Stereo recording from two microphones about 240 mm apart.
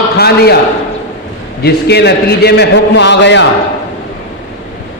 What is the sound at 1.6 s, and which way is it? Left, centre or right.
A man's voice, left.